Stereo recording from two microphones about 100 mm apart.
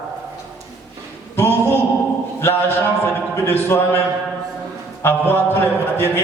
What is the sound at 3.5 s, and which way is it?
Speech, 20° left (ahead or behind).